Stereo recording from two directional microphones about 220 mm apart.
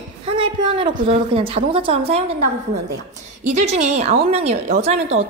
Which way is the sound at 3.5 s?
30° right (ahead or behind).